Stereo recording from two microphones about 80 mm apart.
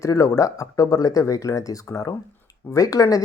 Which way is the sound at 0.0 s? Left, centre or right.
Left.